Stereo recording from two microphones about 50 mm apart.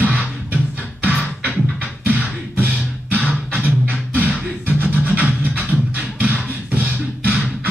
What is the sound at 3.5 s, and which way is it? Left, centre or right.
Music, right.